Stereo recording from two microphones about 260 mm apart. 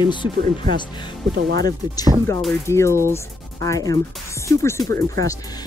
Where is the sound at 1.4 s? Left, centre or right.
Right.